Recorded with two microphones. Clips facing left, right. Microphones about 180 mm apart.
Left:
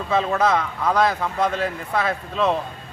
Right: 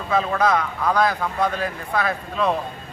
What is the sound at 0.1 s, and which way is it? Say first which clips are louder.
A man's voice: even; 25° left (ahead or behind).